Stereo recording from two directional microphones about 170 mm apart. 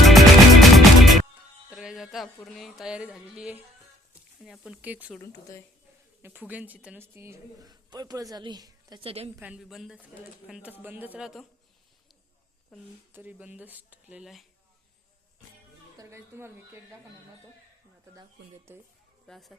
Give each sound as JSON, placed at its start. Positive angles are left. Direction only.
{"t": 0.0, "sound": "music", "side_deg": 0}
{"t": 1.7, "sound": "speech", "side_deg": -5}
{"t": 6.2, "sound": "a woman's voice", "side_deg": -10}
{"t": 9.4, "sound": "speech", "side_deg": -5}
{"t": 13.1, "sound": "speech", "side_deg": -10}
{"t": 16.0, "sound": "speech", "side_deg": -15}
{"t": 18.1, "sound": "speech", "side_deg": -15}
{"t": 19.3, "sound": "speech", "side_deg": 0}